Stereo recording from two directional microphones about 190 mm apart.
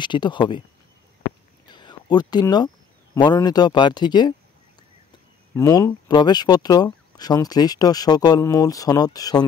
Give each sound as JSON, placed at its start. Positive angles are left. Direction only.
{"t": 0.0, "sound": "speech", "side_deg": 25}
{"t": 1.7, "sound": "a sound", "side_deg": 25}
{"t": 3.2, "sound": "speech", "side_deg": 20}
{"t": 5.5, "sound": "speech", "side_deg": 15}